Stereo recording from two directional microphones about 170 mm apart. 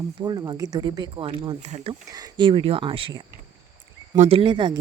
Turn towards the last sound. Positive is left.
turn(degrees=-30)  # may be behind; listen again after turning